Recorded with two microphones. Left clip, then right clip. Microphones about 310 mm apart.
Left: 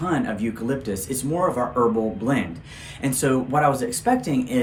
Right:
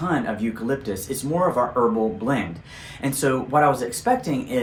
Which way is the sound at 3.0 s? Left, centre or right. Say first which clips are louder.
Even; centre.